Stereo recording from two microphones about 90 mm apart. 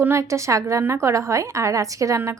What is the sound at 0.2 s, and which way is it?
A woman's voice, 35° right (ahead or behind).